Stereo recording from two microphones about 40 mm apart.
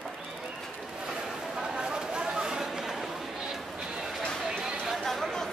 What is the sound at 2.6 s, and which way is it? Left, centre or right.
Chatter, centre.